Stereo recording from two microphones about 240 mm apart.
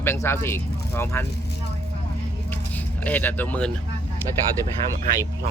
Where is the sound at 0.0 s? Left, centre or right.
Centre.